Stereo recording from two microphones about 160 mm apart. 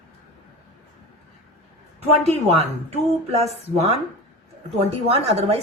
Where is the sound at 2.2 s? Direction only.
40° right (ahead or behind).